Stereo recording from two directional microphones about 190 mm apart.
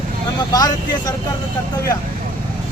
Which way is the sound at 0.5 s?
20° left (ahead or behind).